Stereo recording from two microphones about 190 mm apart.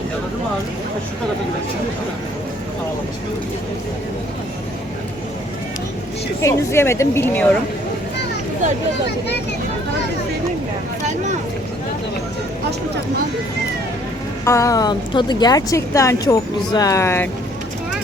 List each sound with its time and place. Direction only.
6.4 s speech: 15° left (ahead or behind)
14.4 s a woman's voice: 15° left (ahead or behind)